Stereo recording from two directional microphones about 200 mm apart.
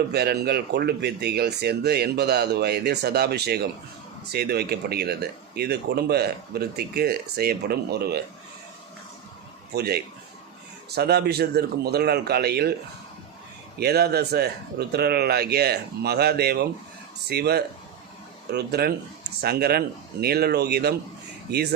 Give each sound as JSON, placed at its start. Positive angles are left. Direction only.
{"t": 0.1, "sound": "speech", "side_deg": -55}
{"t": 9.7, "sound": "speech", "side_deg": -55}
{"t": 13.7, "sound": "speech", "side_deg": -55}